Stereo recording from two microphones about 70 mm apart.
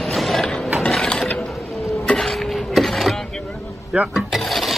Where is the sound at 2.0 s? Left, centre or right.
Centre.